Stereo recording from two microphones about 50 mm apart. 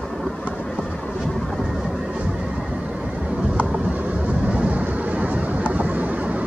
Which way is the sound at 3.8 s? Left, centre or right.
Right.